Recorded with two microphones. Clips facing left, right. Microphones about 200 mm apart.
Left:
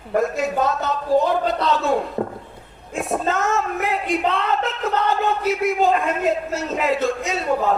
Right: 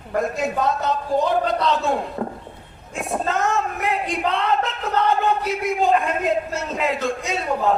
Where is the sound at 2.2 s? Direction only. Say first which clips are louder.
Left 2 dB; 25° left (ahead or behind).